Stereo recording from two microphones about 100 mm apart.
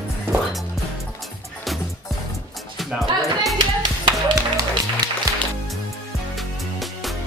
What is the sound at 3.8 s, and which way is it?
Music, 50° right (ahead or behind).